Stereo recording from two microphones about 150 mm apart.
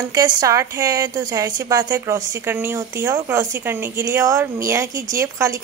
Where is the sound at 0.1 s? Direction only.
25° right (ahead or behind).